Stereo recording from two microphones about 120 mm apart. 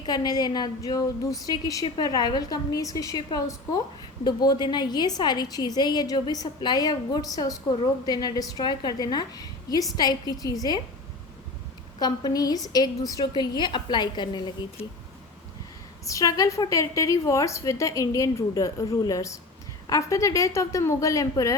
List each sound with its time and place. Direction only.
0.0 s a woman's voice: 35° left (ahead or behind)
11.9 s a woman's voice: 35° left (ahead or behind)
16.0 s a woman's voice: 30° left (ahead or behind)